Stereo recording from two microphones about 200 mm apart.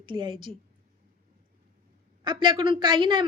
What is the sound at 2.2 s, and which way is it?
A woman's voice, 25° right (ahead or behind).